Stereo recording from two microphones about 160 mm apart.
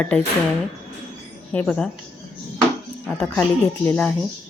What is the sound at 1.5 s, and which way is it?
Speech, 5° left (ahead or behind).